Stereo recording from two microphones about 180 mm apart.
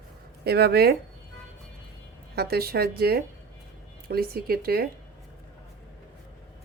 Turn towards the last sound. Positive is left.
turn(degrees=-55)  # may be behind; listen again after turning